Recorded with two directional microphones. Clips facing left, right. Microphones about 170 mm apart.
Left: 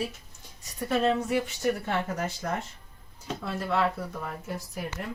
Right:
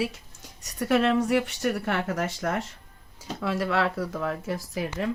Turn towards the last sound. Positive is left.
turn(degrees=-90)